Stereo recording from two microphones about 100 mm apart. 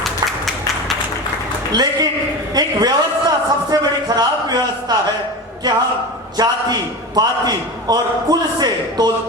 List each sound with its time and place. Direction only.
0.0 s a sound: centre (ahead or behind)
1.7 s a man's voice: 45° right (ahead or behind)
6.3 s a man's voice: 40° right (ahead or behind)